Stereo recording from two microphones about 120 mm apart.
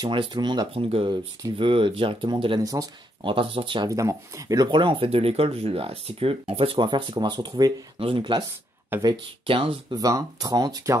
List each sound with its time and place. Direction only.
0.0 s speech: 40° right (ahead or behind)
0.8 s speech: 55° right (ahead or behind)
2.6 s speech: 30° right (ahead or behind)
3.3 s speech: 45° right (ahead or behind)
3.9 s speech: 25° right (ahead or behind); by 9.9 s 45° right (ahead or behind)
9.9 s speech: 30° right (ahead or behind)